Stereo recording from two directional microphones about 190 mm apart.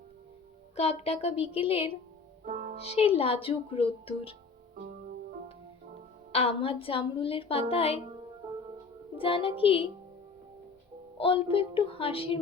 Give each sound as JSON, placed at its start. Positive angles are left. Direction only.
{"t": 0.8, "sound": "speech", "side_deg": 35}
{"t": 2.4, "sound": "music", "side_deg": -40}
{"t": 2.8, "sound": "speech", "side_deg": 30}
{"t": 6.3, "sound": "a woman's voice", "side_deg": 30}
{"t": 9.1, "sound": "a woman's voice", "side_deg": 30}
{"t": 11.2, "sound": "a woman's voice", "side_deg": 30}